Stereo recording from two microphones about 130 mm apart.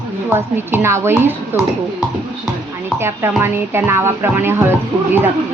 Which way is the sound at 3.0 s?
20° right (ahead or behind).